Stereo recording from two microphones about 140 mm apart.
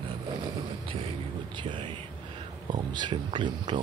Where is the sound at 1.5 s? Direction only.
35° right (ahead or behind).